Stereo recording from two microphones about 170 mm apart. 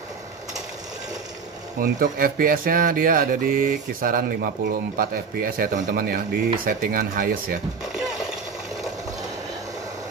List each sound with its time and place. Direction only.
1.8 s speech: 60° right (ahead or behind)